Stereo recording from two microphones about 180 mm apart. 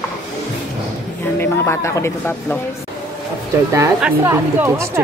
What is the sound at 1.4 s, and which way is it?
Speech, 15° left (ahead or behind).